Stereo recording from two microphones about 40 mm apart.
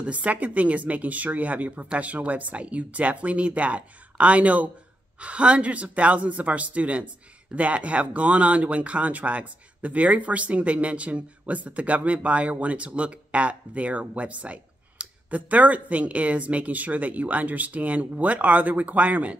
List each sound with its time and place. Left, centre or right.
0.0 s speech: right